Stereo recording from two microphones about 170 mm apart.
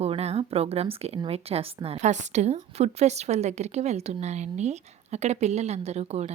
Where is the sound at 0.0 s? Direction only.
40° right (ahead or behind).